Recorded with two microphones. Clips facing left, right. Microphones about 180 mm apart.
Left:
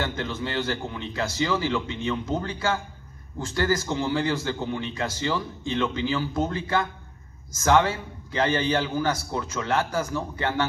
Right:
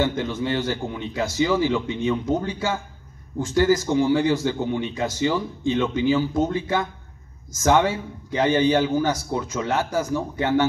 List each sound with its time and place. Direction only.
0.0 s a man's voice: 15° right (ahead or behind)